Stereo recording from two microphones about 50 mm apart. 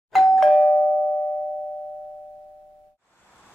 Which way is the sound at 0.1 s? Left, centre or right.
Centre.